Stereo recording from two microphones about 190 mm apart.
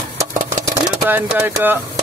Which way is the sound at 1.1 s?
10° right (ahead or behind).